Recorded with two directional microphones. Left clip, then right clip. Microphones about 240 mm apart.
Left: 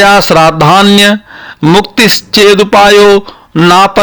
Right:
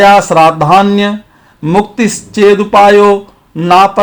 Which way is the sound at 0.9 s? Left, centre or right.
Left.